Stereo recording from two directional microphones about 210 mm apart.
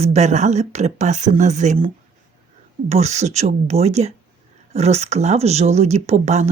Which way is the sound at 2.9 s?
30° right (ahead or behind).